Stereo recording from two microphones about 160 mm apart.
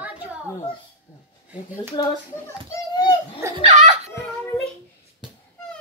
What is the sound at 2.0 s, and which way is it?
Speech, 25° left (ahead or behind).